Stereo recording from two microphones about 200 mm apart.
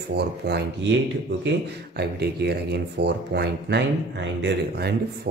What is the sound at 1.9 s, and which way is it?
Speech, 55° right (ahead or behind).